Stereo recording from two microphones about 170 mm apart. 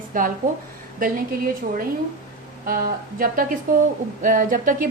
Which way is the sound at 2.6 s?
60° right (ahead or behind).